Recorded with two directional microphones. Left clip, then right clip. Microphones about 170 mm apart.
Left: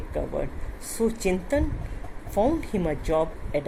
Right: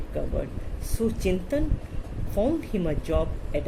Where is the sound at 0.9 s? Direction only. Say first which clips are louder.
Left 2 dB; 20° left (ahead or behind).